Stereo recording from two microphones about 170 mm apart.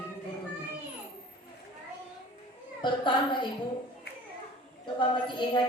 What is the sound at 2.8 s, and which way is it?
Speech, 30° left (ahead or behind).